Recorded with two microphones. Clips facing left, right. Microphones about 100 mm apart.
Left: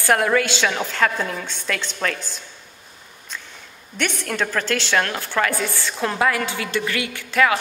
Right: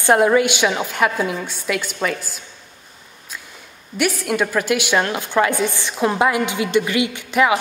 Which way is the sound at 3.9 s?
5° right (ahead or behind).